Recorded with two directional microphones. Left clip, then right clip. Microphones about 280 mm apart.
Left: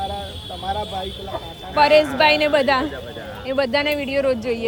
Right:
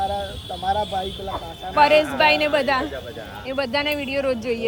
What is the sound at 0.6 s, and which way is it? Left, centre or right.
Speech, centre.